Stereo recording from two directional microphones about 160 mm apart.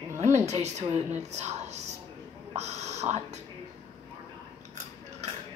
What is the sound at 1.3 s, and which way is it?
Speech, 45° right (ahead or behind).